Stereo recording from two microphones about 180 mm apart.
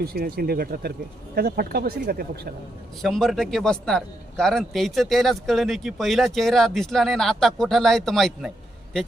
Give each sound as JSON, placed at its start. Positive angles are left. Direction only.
{"t": 0.0, "sound": "speech", "side_deg": -55}
{"t": 3.0, "sound": "a man's voice", "side_deg": 0}